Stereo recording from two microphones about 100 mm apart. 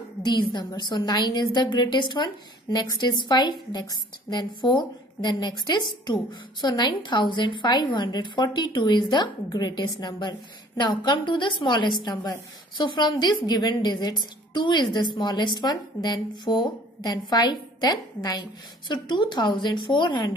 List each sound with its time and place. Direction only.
0.2 s a woman's voice: 50° left (ahead or behind)
18.9 s a woman's voice: 50° left (ahead or behind)